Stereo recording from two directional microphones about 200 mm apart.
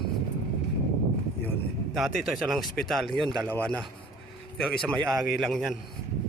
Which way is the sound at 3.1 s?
20° right (ahead or behind).